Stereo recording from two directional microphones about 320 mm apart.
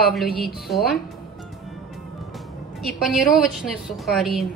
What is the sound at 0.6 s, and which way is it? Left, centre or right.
Speech, centre.